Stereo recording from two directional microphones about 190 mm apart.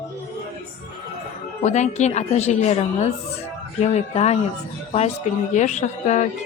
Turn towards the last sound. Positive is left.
turn(degrees=40)  # may be behind; listen again after turning